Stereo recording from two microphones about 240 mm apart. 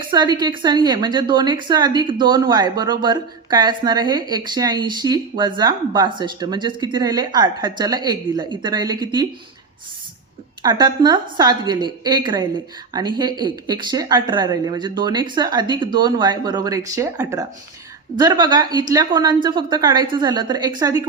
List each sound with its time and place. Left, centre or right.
0.0 s a woman's voice: centre
10.6 s a woman's voice: centre